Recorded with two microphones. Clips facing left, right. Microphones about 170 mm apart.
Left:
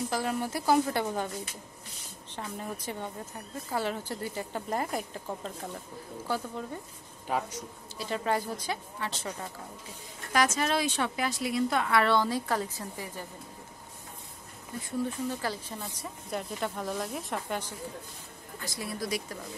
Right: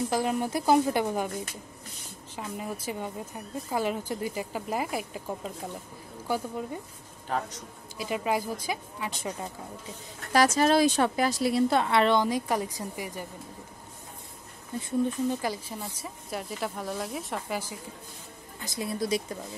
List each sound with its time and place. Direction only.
0.1 s a woman's voice: 15° right (ahead or behind)
2.3 s a woman's voice: 10° right (ahead or behind)
7.2 s a man's voice: 10° left (ahead or behind)
8.0 s a woman's voice: 10° right (ahead or behind)
10.3 s a woman's voice: 35° right (ahead or behind); by 13.3 s 15° right (ahead or behind)
14.8 s speech: 20° right (ahead or behind)
18.6 s a woman's voice: 20° right (ahead or behind)